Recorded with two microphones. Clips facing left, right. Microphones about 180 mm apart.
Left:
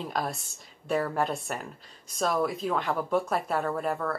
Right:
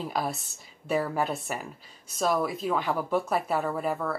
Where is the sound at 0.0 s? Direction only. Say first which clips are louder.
Right 1 dB; 5° right (ahead or behind).